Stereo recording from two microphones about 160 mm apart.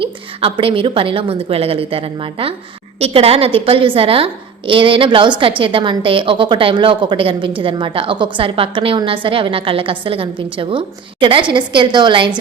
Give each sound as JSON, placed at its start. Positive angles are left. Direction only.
{"t": 0.0, "sound": "a woman's voice", "side_deg": -35}